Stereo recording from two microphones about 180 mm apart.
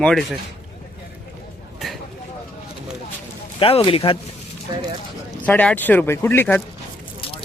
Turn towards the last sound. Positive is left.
turn(degrees=10)  # may be behind; listen again after turning